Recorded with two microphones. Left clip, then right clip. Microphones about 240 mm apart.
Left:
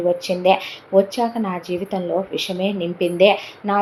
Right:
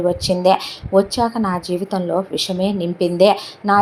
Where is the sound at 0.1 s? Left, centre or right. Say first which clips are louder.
Left 1 dB; right.